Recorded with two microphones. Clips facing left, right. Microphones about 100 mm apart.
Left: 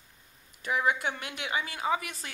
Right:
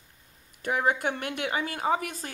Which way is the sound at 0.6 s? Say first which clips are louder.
Right 2 dB; 50° right (ahead or behind).